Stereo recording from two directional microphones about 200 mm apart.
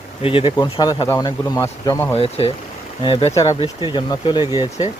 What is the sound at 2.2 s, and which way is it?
Speech, 30° left (ahead or behind).